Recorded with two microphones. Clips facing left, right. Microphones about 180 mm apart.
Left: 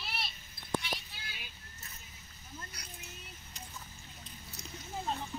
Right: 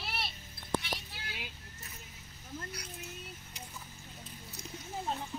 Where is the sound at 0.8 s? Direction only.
75° right (ahead or behind).